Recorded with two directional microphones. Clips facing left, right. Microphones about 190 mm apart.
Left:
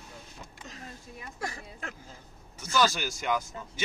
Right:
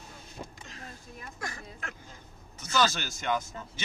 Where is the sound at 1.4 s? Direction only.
35° left (ahead or behind).